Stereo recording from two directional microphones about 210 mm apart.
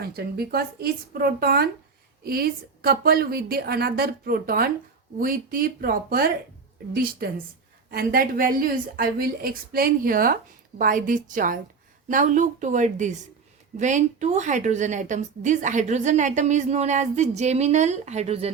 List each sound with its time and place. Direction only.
0.0 s a woman's voice: 50° right (ahead or behind); by 18.5 s 30° right (ahead or behind)